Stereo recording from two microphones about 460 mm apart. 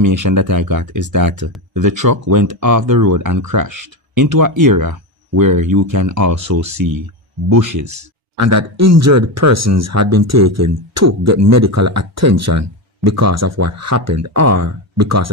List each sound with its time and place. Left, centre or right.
0.0 s speech: right